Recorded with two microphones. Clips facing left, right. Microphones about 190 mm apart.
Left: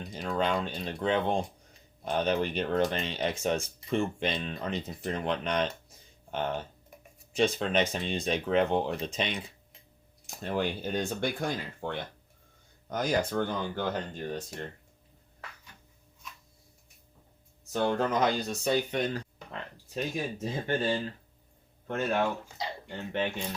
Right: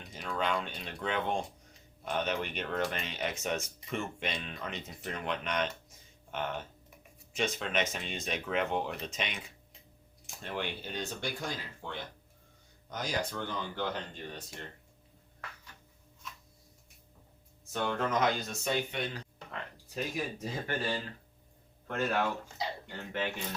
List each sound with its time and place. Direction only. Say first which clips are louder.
0.0 s speech: left 5 dB; 35° left (ahead or behind)
17.7 s speech: left 5 dB; 35° left (ahead or behind)
19.9 s speech: left 3 dB; 25° left (ahead or behind)